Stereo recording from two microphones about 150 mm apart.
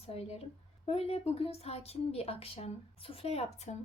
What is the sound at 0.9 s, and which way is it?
A woman's voice, 40° left (ahead or behind).